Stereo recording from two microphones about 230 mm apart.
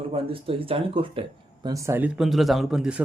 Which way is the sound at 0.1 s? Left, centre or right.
Right.